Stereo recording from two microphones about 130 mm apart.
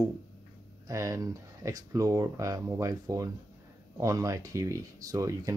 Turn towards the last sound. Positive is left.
turn(degrees=-25)  # may be behind; listen again after turning